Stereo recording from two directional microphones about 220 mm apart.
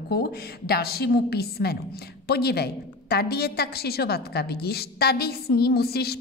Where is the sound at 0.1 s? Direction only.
45° left (ahead or behind).